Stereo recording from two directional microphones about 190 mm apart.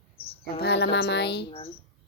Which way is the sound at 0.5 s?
60° left (ahead or behind).